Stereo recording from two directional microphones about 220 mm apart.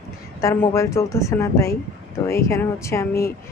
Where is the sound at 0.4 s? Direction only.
10° left (ahead or behind).